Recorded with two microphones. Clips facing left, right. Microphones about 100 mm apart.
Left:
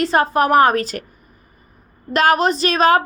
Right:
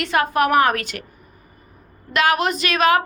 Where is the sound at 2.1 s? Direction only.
35° left (ahead or behind).